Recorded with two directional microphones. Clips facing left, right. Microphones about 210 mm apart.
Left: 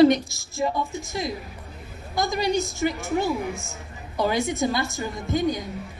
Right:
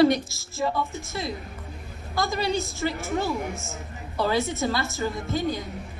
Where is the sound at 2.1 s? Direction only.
15° left (ahead or behind).